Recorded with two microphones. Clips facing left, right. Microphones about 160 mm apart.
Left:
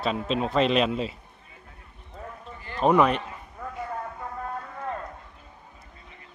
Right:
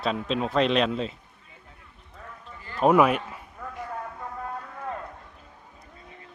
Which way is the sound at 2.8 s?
5° right (ahead or behind).